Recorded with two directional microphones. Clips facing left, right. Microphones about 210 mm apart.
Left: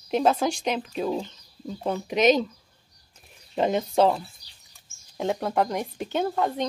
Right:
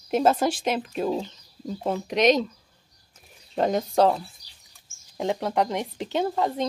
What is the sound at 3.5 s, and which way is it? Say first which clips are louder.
Speech: even; centre (ahead or behind).